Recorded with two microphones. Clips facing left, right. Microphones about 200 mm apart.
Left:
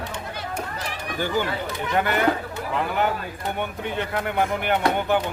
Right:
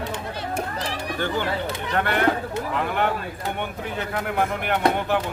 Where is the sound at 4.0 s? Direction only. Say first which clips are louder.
Even; centre (ahead or behind).